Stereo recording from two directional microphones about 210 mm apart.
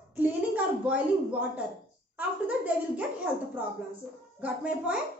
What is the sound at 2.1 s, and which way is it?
Speech, 5° right (ahead or behind).